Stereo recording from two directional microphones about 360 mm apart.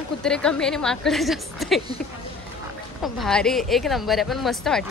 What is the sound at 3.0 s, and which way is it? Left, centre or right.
A woman's voice, centre.